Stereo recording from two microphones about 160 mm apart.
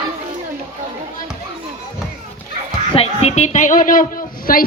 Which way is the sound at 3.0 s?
40° left (ahead or behind).